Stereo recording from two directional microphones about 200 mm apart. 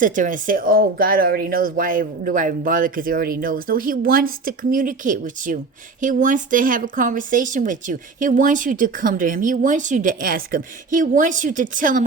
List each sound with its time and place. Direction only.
0.0 s speech: 40° right (ahead or behind)